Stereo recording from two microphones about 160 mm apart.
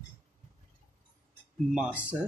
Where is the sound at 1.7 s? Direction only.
10° right (ahead or behind).